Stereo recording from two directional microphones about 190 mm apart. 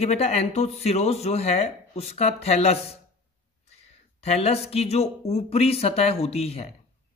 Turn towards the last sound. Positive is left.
turn(degrees=30)  # may be behind; listen again after turning